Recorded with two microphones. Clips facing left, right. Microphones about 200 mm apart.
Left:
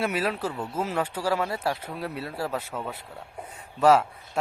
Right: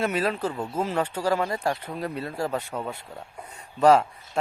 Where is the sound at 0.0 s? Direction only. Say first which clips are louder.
Right 2 dB; 10° left (ahead or behind).